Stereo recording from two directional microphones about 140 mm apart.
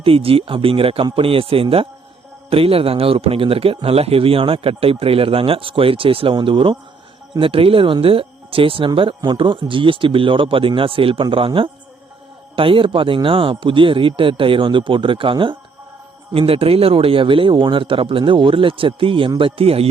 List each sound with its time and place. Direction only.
0.0 s speech: 40° right (ahead or behind)